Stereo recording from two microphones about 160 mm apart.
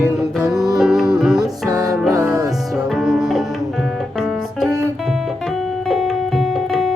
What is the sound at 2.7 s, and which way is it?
Music, 5° right (ahead or behind).